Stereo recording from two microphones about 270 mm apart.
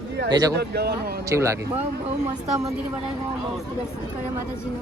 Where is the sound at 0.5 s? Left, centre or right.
Right.